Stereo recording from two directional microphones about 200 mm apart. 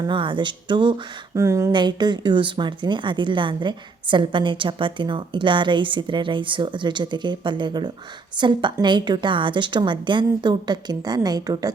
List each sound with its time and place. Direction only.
0.0 s speech: 25° right (ahead or behind)